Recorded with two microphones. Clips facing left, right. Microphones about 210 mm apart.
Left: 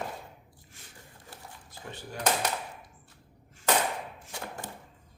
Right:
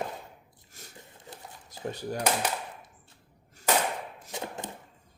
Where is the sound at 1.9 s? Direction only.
40° right (ahead or behind).